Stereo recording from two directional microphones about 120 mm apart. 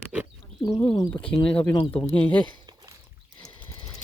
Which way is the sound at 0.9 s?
35° left (ahead or behind).